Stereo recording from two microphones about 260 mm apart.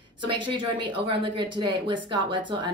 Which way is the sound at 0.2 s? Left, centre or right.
Centre.